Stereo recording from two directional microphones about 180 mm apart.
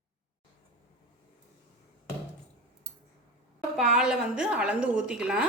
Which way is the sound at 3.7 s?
5° right (ahead or behind).